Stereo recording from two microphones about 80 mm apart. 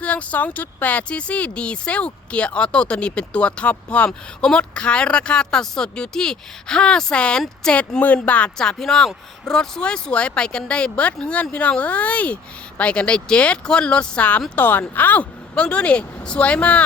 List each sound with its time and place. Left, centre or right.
0.0 s speech: centre